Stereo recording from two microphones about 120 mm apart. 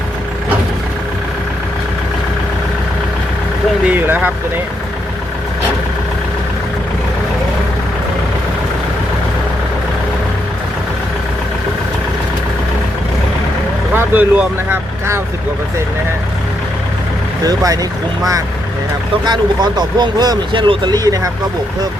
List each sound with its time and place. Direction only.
3.8 s speech: 15° right (ahead or behind)
13.9 s speech: 15° right (ahead or behind)
17.4 s speech: 30° right (ahead or behind)